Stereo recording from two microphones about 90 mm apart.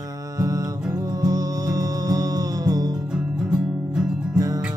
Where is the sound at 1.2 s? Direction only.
40° right (ahead or behind).